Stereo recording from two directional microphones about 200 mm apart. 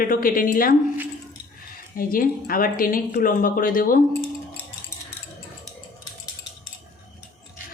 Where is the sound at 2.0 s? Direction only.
45° left (ahead or behind).